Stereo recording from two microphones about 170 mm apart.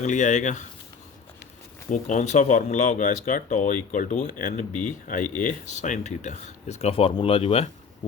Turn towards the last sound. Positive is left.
turn(degrees=35)  # may be behind; listen again after turning